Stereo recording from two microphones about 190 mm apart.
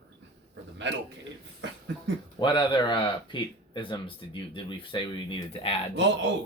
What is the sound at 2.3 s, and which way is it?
Speech, 25° left (ahead or behind).